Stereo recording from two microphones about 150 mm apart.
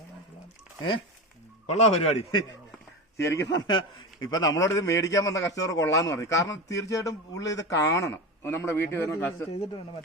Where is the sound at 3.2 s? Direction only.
20° left (ahead or behind).